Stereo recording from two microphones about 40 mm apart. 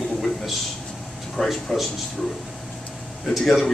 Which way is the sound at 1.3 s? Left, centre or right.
Centre.